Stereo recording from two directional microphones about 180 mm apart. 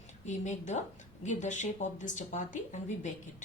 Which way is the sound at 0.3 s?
40° left (ahead or behind).